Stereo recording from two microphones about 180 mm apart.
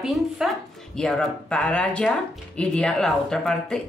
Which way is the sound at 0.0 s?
Centre (ahead or behind).